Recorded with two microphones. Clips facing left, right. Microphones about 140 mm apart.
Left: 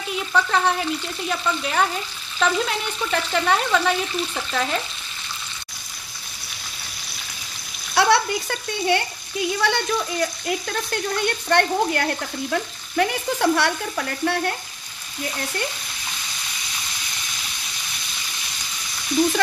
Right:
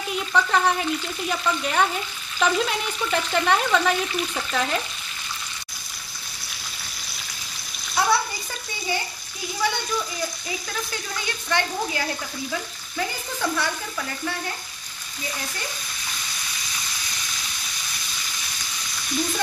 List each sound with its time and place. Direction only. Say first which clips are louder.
0.1 s frying: left 1 dB; centre (ahead or behind)
7.9 s speech: left 4 dB; 75° left (ahead or behind)